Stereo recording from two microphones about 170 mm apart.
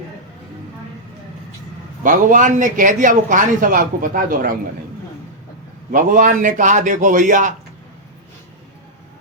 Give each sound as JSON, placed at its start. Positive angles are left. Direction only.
{"t": 2.0, "sound": "a man's voice", "side_deg": -50}
{"t": 5.9, "sound": "a man's voice", "side_deg": -50}